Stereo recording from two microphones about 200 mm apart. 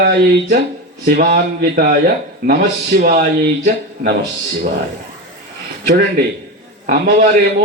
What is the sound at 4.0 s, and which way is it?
Speech, 35° right (ahead or behind).